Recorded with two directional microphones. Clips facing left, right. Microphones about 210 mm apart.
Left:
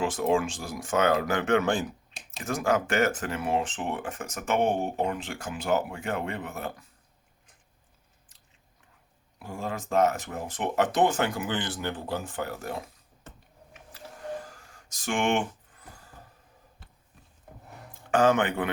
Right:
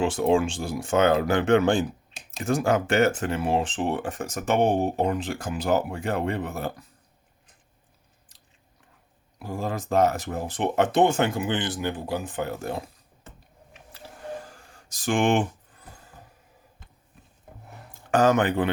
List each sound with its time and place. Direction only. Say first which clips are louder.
0.0 s speech: right 4 dB; 30° right (ahead or behind)
9.4 s speech: right 4 dB; 35° right (ahead or behind)
14.5 s a sound: right 2 dB; 30° right (ahead or behind)
17.9 s a man's voice: right 2 dB; 40° right (ahead or behind)